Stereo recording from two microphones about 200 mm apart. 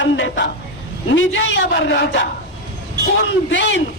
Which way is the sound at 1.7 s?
55° left (ahead or behind).